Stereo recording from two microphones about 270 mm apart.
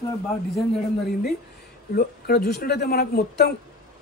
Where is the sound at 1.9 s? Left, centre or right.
Left.